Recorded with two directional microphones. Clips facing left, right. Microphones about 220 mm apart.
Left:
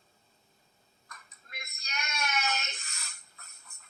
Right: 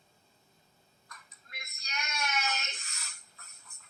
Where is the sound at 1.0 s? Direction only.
50° left (ahead or behind).